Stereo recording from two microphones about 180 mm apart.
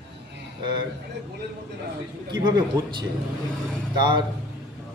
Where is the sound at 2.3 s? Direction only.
25° right (ahead or behind).